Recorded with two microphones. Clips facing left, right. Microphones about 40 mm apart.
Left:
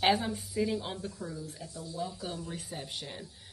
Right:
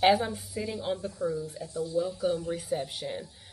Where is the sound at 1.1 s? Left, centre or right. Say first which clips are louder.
Right 10 dB; centre.